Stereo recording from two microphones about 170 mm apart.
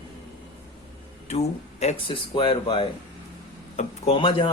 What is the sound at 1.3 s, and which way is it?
A man's voice, 40° left (ahead or behind).